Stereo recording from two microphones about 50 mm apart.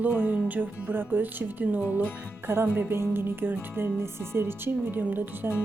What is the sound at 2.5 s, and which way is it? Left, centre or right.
Speech, right.